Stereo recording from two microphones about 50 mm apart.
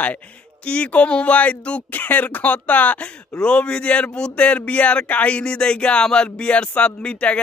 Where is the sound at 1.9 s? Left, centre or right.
Left.